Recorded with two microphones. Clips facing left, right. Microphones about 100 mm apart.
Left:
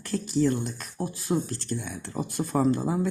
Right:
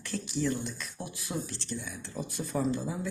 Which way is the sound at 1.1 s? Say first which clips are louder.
Left 10 dB; 35° left (ahead or behind).